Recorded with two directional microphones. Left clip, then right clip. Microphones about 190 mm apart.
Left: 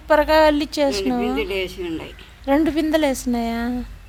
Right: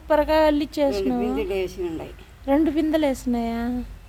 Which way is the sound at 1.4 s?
50° right (ahead or behind).